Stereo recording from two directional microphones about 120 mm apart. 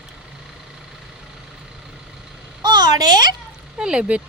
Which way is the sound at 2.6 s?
35° right (ahead or behind).